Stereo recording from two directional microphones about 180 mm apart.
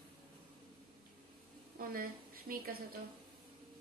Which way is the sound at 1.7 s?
55° right (ahead or behind).